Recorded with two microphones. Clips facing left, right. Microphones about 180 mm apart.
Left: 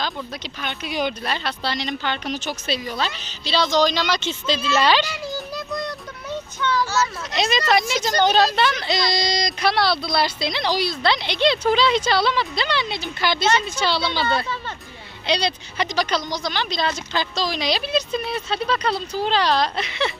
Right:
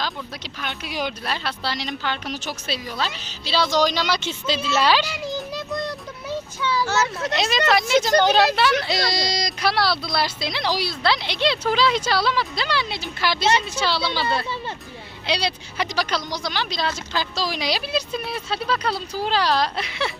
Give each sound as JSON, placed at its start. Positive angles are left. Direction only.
{"t": 0.6, "sound": "speech", "side_deg": 0}
{"t": 5.2, "sound": "music", "side_deg": -20}
{"t": 6.6, "sound": "a child's voice", "side_deg": -5}
{"t": 6.8, "sound": "speech", "side_deg": -65}
{"t": 7.3, "sound": "speech", "side_deg": 0}